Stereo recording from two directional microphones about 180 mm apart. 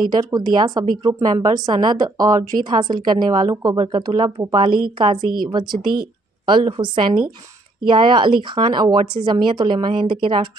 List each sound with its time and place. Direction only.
0.0 s a woman's voice: 25° right (ahead or behind)
6.4 s a woman's voice: 25° right (ahead or behind)